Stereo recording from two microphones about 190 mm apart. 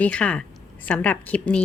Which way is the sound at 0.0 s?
5° left (ahead or behind).